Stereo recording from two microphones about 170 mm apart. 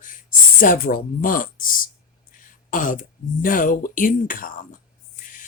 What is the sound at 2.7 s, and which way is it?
Speech, 50° left (ahead or behind).